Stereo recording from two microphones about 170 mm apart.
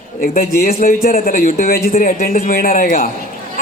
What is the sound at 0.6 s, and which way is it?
A woman's voice, 55° left (ahead or behind).